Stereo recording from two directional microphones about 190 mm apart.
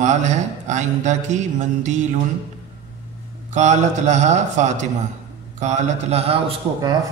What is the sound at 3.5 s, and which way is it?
A man's voice, 40° right (ahead or behind).